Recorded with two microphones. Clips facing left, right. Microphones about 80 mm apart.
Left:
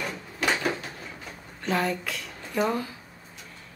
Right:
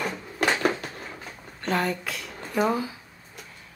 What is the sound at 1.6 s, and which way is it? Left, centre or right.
A woman's voice, centre.